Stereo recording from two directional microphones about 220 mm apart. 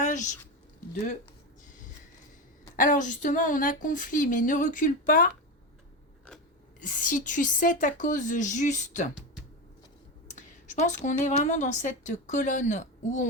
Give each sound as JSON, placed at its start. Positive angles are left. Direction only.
{"t": 0.0, "sound": "a sound", "side_deg": 35}
{"t": 2.7, "sound": "a woman's voice", "side_deg": 35}
{"t": 6.7, "sound": "a woman's voice", "side_deg": 35}
{"t": 10.3, "sound": "a woman's voice", "side_deg": 35}